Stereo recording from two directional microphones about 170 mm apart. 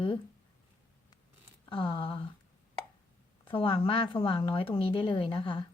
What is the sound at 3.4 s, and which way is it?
A woman's voice, 30° left (ahead or behind).